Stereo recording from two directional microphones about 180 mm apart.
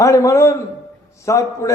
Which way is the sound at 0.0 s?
15° left (ahead or behind).